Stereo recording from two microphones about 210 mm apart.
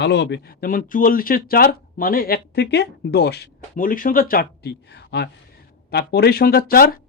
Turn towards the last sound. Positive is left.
turn(degrees=45)  # may be behind; listen again after turning